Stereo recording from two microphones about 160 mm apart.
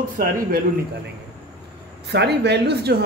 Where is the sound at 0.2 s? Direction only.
65° right (ahead or behind).